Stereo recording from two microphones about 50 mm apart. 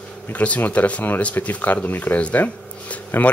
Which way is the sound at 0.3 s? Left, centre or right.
Left.